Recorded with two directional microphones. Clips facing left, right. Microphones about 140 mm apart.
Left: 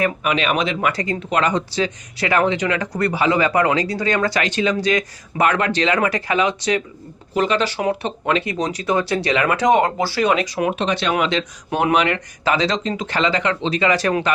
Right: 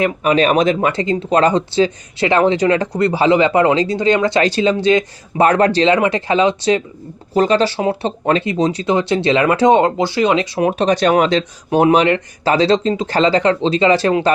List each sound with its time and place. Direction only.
0.0 s speech: 35° right (ahead or behind)